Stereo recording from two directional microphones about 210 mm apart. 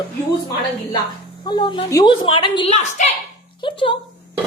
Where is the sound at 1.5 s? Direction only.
20° left (ahead or behind).